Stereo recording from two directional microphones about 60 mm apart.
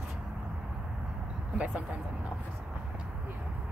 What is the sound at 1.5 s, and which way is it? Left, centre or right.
Speech, right.